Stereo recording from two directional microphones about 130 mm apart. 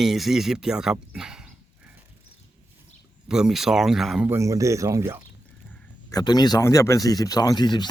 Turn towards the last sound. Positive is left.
turn(degrees=35)  # may be behind; listen again after turning